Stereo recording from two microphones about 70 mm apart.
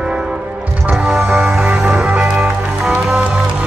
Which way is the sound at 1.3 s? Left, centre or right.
Centre.